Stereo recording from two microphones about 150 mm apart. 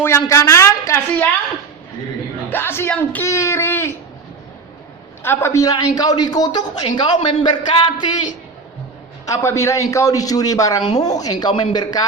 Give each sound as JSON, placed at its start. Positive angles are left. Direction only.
{"t": 0.0, "sound": "a woman's voice", "side_deg": 20}
{"t": 2.5, "sound": "speech", "side_deg": 15}
{"t": 5.2, "sound": "a woman's voice", "side_deg": 15}
{"t": 9.2, "sound": "a woman's voice", "side_deg": 20}